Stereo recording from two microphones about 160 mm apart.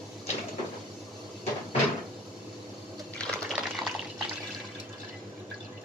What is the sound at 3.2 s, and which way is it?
Water, 5° left (ahead or behind).